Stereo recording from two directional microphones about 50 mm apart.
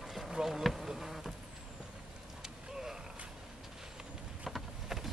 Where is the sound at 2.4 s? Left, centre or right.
Centre.